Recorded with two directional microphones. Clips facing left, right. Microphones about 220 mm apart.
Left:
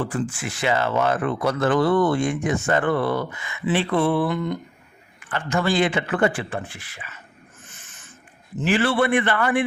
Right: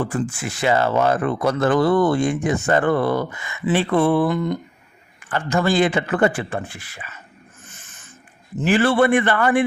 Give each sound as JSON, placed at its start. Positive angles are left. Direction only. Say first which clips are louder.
{"t": 0.0, "sound": "speech", "louder": "right 2 dB", "side_deg": -45}
{"t": 8.6, "sound": "a man's voice", "louder": "right 4 dB", "side_deg": -45}